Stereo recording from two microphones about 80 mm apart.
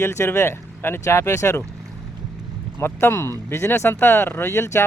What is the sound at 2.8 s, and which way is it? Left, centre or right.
Speech, left.